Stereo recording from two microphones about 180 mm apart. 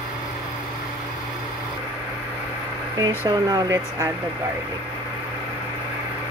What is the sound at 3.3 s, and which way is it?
Speech, 20° right (ahead or behind).